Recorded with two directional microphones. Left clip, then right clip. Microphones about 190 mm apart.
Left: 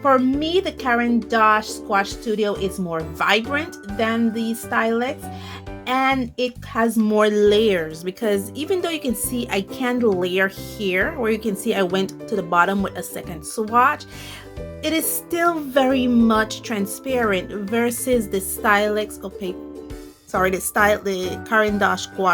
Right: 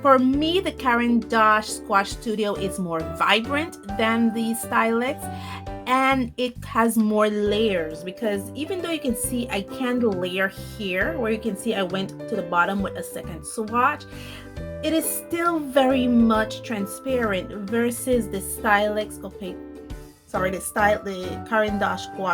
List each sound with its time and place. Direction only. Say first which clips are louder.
0.0 s speech: even; centre (ahead or behind)
7.1 s speech: left 5 dB; 15° left (ahead or behind)